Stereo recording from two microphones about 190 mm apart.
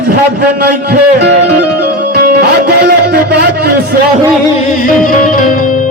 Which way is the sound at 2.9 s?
55° right (ahead or behind).